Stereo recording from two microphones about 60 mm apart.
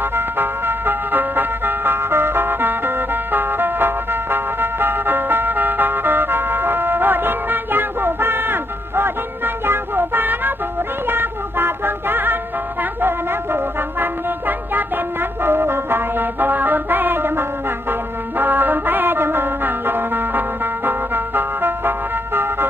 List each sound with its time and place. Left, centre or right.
0.1 s music: right
15.4 s music: right